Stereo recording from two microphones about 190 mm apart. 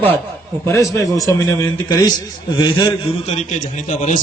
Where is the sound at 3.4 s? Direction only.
40° left (ahead or behind).